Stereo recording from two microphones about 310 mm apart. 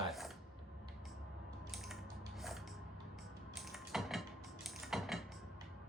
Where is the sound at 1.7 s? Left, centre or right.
Centre.